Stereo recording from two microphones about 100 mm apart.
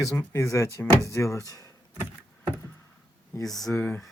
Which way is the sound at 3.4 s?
5° left (ahead or behind).